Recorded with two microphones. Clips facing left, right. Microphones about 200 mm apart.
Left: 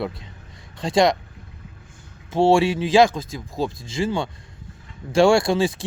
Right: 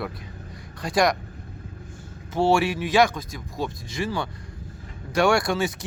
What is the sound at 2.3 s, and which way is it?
Speech, 25° left (ahead or behind).